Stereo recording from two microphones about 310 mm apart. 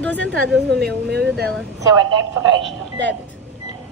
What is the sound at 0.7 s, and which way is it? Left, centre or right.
Speech, right.